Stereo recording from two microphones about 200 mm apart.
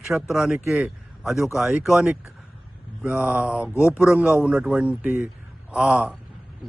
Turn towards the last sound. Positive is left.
turn(degrees=-5)  # may be behind; listen again after turning